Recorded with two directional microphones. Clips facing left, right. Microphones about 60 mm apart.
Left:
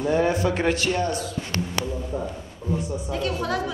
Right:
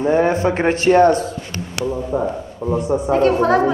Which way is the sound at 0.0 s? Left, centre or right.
Right.